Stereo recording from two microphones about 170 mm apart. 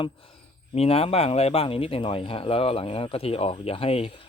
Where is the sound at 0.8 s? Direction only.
35° left (ahead or behind).